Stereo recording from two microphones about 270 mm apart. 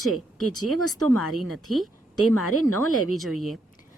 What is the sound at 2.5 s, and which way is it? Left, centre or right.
Speech, left.